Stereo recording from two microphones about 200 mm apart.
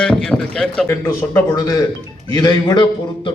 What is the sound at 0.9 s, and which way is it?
A man's voice, 15° left (ahead or behind).